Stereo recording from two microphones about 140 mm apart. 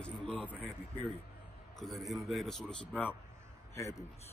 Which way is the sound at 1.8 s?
Centre (ahead or behind).